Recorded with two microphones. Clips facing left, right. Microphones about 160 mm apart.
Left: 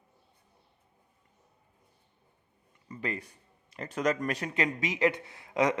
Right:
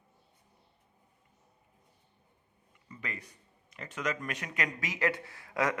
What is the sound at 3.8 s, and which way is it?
Speech, 35° left (ahead or behind).